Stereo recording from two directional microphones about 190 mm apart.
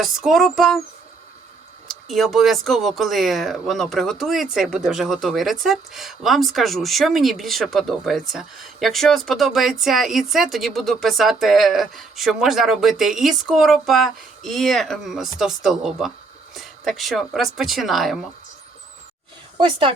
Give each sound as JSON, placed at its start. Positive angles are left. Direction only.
{"t": 0.0, "sound": "speech", "side_deg": 0}
{"t": 1.9, "sound": "speech", "side_deg": 0}
{"t": 19.5, "sound": "speech", "side_deg": -25}